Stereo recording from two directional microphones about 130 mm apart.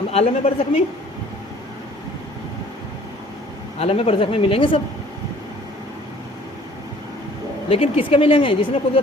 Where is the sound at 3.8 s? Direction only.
45° left (ahead or behind).